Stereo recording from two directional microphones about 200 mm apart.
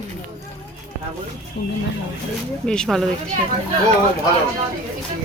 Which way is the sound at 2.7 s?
Centre (ahead or behind).